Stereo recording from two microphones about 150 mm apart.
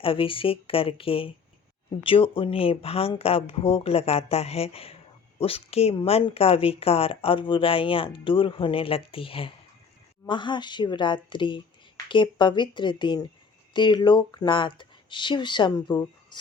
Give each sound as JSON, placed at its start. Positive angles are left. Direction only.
{"t": 0.0, "sound": "speech", "side_deg": 35}
{"t": 16.3, "sound": "music", "side_deg": 30}